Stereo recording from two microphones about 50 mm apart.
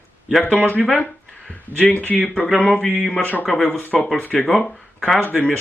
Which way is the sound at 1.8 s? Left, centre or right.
Left.